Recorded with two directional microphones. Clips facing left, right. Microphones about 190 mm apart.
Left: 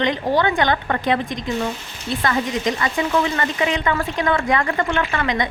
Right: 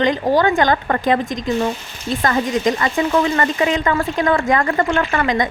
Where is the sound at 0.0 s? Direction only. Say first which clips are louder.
Right 3 dB; 45° right (ahead or behind).